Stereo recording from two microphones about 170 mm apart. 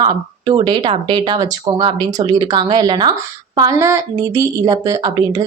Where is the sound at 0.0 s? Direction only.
25° right (ahead or behind).